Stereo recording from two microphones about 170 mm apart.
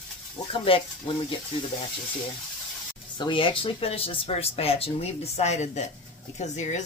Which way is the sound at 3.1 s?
30° left (ahead or behind).